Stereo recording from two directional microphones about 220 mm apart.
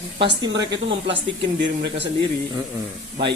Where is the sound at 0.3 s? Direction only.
50° right (ahead or behind).